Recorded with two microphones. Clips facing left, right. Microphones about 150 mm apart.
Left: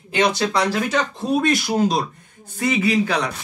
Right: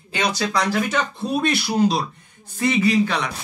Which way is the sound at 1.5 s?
45° left (ahead or behind).